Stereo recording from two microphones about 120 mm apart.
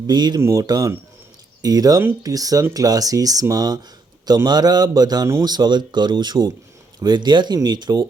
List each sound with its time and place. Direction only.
0.1 s speech: 35° right (ahead or behind)